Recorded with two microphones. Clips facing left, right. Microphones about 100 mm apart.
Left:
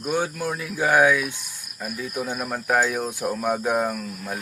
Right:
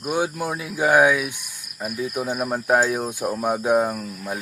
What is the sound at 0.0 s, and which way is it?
Cricket, 15° right (ahead or behind).